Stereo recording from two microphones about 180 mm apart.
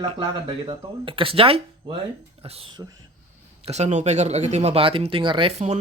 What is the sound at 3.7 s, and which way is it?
Speech, 40° right (ahead or behind).